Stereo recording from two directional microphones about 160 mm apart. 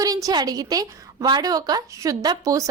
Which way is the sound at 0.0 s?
20° right (ahead or behind).